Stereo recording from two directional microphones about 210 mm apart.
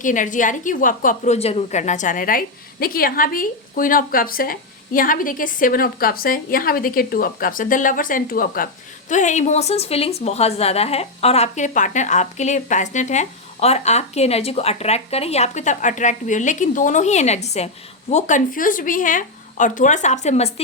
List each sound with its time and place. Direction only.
0.0 s a woman's voice: 40° left (ahead or behind)